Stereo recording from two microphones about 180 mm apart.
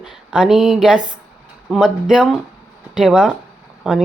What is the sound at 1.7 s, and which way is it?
Speech, 5° right (ahead or behind).